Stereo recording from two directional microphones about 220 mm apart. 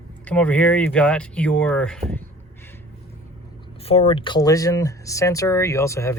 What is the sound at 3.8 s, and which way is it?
Speech, 25° left (ahead or behind).